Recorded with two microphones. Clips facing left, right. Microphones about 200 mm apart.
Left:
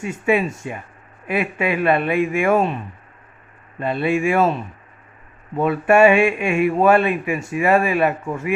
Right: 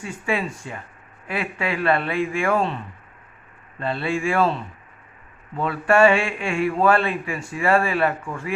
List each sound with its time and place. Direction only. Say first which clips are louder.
0.0 s speech: left 6 dB; 20° left (ahead or behind)
3.8 s speech: left 5 dB; 15° left (ahead or behind)